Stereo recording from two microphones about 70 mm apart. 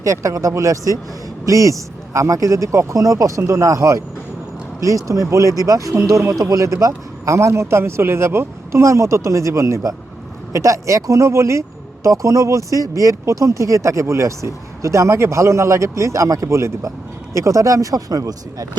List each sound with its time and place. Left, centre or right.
0.0 s speech: right
5.0 s speech: right